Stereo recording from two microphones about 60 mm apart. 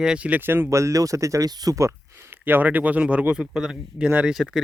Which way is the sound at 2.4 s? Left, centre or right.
Right.